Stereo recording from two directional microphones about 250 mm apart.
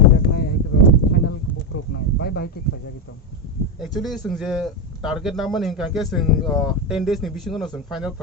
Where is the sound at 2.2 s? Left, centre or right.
Left.